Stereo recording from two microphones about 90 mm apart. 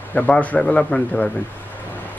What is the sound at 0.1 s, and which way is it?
Speech, 20° left (ahead or behind).